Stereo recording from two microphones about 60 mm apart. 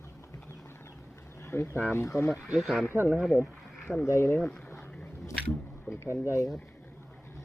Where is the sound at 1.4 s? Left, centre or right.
Left.